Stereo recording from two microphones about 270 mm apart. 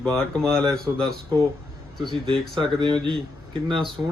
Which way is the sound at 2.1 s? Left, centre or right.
Centre.